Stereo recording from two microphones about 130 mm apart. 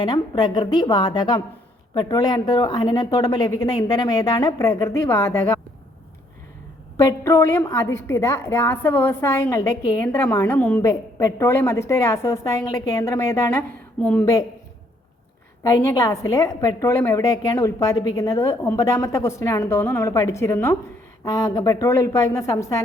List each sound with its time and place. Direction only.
0.0 s a woman's voice: 35° left (ahead or behind)
6.9 s a woman's voice: 25° left (ahead or behind)
10.8 s a woman's voice: 25° left (ahead or behind)
14.0 s a woman's voice: 10° left (ahead or behind)
15.6 s a woman's voice: 25° left (ahead or behind)